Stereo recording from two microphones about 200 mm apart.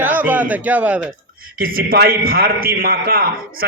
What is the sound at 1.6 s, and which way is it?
A man's voice, 45° right (ahead or behind).